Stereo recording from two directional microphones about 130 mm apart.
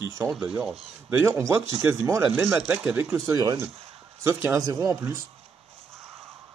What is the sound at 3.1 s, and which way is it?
Speech, 25° right (ahead or behind).